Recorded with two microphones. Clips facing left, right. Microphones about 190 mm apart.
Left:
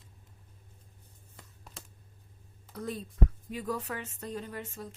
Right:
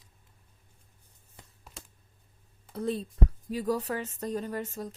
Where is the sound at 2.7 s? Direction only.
30° right (ahead or behind).